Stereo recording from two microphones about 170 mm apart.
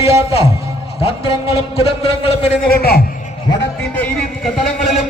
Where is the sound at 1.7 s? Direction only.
35° left (ahead or behind).